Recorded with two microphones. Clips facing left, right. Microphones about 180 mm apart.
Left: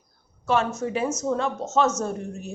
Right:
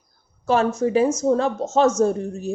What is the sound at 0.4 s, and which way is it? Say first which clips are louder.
A woman's voice: right 5 dB; 35° right (ahead or behind).